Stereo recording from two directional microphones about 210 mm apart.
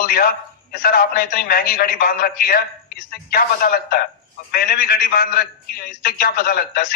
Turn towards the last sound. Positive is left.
turn(degrees=45)  # may be behind; listen again after turning